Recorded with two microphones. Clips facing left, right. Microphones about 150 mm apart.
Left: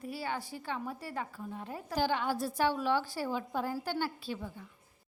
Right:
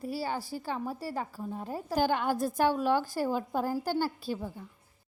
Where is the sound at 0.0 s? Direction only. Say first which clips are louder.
Right 4 dB; 35° right (ahead or behind).